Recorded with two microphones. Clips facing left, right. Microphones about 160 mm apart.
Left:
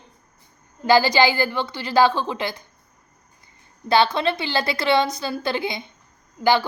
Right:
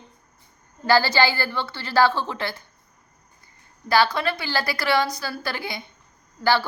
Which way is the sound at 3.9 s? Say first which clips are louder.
Left 2 dB; 25° left (ahead or behind).